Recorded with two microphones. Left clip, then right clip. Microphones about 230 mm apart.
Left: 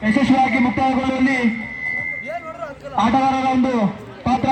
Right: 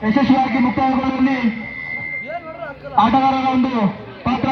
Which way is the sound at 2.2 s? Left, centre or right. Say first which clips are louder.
Even; left.